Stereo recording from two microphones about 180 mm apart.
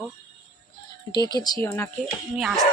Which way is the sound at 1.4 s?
15° left (ahead or behind).